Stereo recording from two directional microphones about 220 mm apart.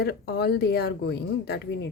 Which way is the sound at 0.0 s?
50° left (ahead or behind).